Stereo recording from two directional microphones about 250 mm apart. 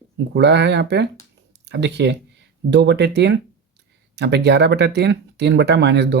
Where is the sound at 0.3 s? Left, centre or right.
Right.